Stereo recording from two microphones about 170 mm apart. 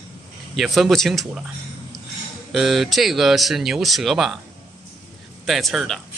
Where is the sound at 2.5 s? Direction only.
Centre (ahead or behind).